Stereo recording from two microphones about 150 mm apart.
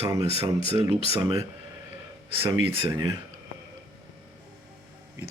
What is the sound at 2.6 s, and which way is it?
Speech, 35° right (ahead or behind).